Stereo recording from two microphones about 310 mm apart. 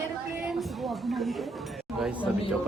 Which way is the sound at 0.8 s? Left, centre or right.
Centre.